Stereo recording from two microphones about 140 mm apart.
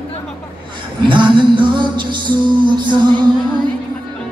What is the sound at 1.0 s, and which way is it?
Music, 35° right (ahead or behind).